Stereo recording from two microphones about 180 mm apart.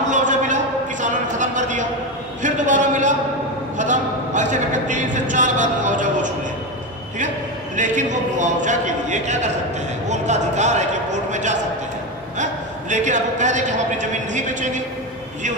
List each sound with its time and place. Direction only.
0.1 s a sound: 45° right (ahead or behind)
3.7 s speech: 45° right (ahead or behind)
7.7 s a man's voice: 45° right (ahead or behind)
12.9 s a man's voice: 45° right (ahead or behind)